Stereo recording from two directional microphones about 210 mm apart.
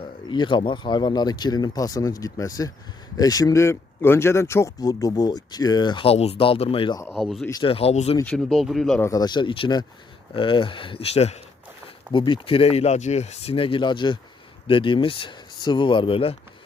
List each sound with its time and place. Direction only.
0.3 s speech: 20° left (ahead or behind)
7.1 s speech: centre (ahead or behind)
7.4 s speech: 20° left (ahead or behind)
8.2 s speech: 5° left (ahead or behind)
9.0 s speech: 20° left (ahead or behind)